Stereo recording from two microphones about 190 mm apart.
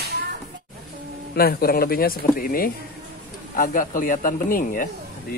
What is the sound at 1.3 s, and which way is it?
A man's voice, 55° left (ahead or behind).